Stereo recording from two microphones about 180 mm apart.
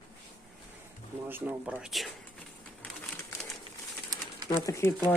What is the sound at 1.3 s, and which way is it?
Speech, 10° right (ahead or behind).